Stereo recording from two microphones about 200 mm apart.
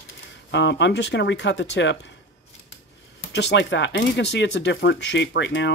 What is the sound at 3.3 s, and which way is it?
Speech, 60° left (ahead or behind).